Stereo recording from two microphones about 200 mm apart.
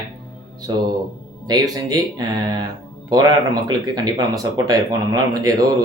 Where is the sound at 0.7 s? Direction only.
20° right (ahead or behind).